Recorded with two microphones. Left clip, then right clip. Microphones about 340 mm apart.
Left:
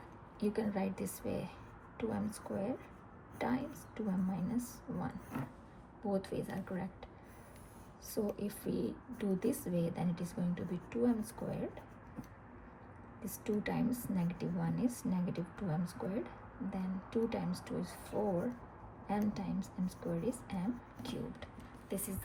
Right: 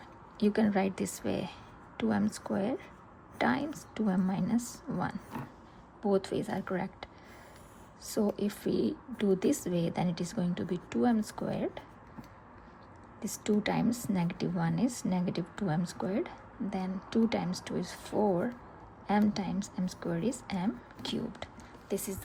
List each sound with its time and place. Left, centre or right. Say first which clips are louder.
0.3 s a woman's voice: right 8 dB; right
8.4 s a woman's voice: right 8 dB; right
13.2 s a woman's voice: right 7 dB; right